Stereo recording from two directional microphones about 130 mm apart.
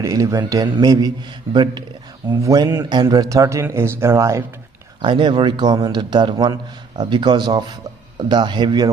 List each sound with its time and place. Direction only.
0.0 s a man's voice: 25° right (ahead or behind)
5.0 s a man's voice: 40° right (ahead or behind)